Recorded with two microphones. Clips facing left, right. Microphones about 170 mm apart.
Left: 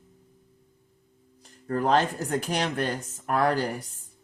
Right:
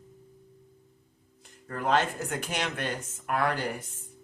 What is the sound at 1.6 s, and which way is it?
Speech, 40° left (ahead or behind).